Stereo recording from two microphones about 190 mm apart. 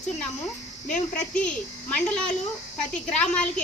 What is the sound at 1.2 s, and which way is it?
Speech, 5° left (ahead or behind).